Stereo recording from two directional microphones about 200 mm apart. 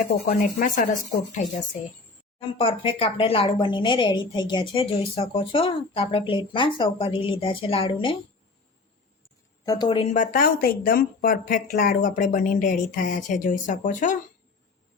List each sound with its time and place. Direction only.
0.0 s speech: 40° left (ahead or behind)
2.4 s speech: 30° left (ahead or behind)
9.6 s speech: 20° left (ahead or behind); by 14.2 s 40° left (ahead or behind)